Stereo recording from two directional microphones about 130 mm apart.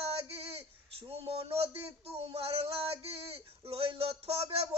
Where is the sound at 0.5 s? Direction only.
45° right (ahead or behind).